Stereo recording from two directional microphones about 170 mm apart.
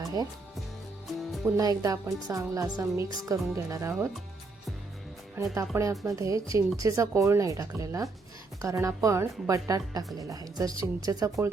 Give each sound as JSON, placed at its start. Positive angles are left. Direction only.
{"t": 0.0, "sound": "music", "side_deg": -20}
{"t": 1.5, "sound": "a woman's voice", "side_deg": -20}
{"t": 5.4, "sound": "a woman's voice", "side_deg": -10}